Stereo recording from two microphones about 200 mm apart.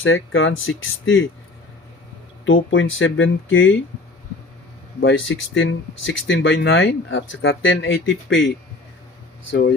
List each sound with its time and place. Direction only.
0.0 s speech: 75° left (ahead or behind)
2.4 s speech: 70° left (ahead or behind)
4.9 s speech: 60° left (ahead or behind)
9.5 s speech: 60° left (ahead or behind)